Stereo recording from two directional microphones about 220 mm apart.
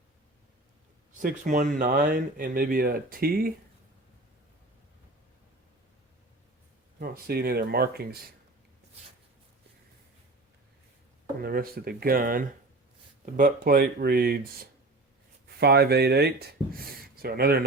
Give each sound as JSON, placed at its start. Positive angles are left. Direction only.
{"t": 1.2, "sound": "speech", "side_deg": -35}
{"t": 7.0, "sound": "speech", "side_deg": -45}
{"t": 11.4, "sound": "speech", "side_deg": -40}